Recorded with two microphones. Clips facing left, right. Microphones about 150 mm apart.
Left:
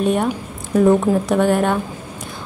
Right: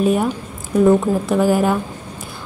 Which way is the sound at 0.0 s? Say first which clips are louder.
Right 1 dB; centre (ahead or behind).